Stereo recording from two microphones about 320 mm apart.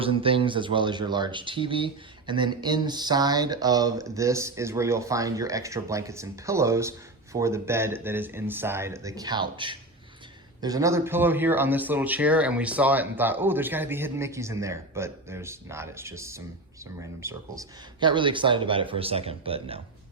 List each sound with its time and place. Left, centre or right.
0.0 s speech: centre